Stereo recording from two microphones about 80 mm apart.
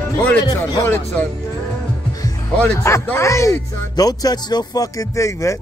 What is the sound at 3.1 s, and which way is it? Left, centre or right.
Speech, left.